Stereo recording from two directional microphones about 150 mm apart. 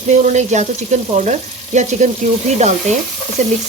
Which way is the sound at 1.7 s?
55° right (ahead or behind).